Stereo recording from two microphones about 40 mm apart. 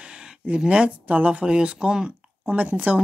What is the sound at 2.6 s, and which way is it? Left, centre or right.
Speech, right.